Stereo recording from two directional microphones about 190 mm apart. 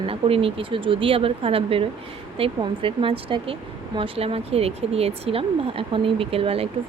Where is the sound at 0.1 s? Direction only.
30° right (ahead or behind).